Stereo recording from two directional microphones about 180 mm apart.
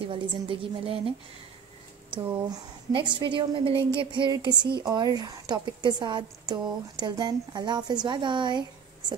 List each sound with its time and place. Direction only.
0.0 s speech: 30° right (ahead or behind)
2.9 s speech: 25° right (ahead or behind)